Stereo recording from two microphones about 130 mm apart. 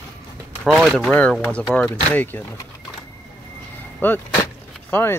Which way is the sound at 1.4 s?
10° left (ahead or behind).